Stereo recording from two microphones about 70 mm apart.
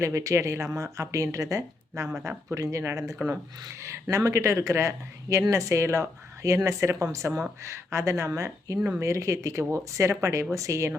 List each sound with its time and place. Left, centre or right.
0.0 s speech: right
3.2 s speech: right